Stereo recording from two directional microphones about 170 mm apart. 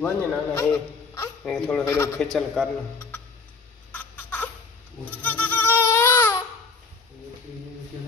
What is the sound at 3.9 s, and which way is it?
Crying, 10° left (ahead or behind).